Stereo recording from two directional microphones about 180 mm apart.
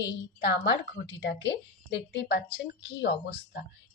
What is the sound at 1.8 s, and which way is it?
A woman's voice, 70° left (ahead or behind).